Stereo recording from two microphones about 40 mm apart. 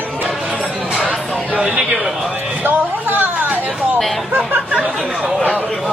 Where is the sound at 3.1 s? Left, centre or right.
Right.